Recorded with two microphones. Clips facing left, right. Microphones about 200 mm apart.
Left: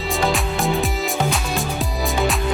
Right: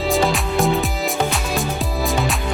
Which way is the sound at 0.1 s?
Centre (ahead or behind).